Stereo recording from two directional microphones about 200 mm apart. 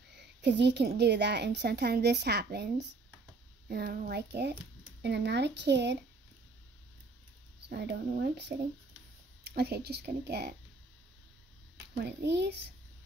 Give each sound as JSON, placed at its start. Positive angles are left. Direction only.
{"t": 0.4, "sound": "a woman's voice", "side_deg": -60}
{"t": 7.7, "sound": "a woman's voice", "side_deg": -55}
{"t": 12.0, "sound": "a woman's voice", "side_deg": -60}